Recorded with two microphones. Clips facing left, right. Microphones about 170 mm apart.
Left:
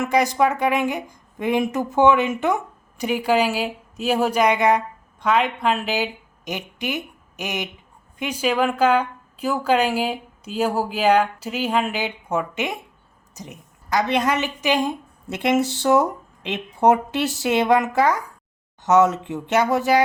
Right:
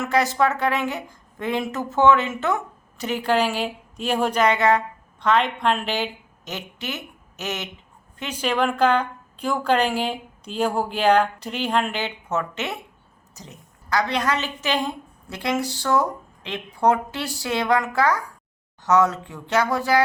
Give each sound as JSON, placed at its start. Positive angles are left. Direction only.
{"t": 0.0, "sound": "a woman's voice", "side_deg": 15}